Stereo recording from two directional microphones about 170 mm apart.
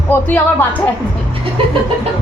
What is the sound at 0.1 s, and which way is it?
Speech, 10° left (ahead or behind).